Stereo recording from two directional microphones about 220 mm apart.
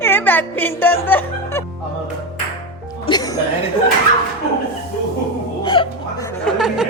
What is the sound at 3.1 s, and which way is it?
Music, 20° left (ahead or behind).